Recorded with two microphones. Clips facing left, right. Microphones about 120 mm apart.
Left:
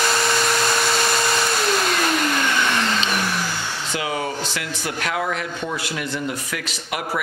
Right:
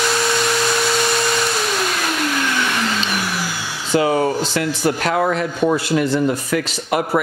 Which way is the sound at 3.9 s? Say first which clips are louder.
Right 10 dB; 35° right (ahead or behind).